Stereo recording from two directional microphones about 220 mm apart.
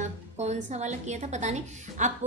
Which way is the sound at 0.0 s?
30° right (ahead or behind).